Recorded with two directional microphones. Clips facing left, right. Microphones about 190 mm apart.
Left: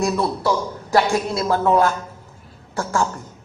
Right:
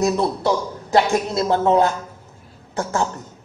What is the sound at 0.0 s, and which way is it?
A man's voice, 20° right (ahead or behind).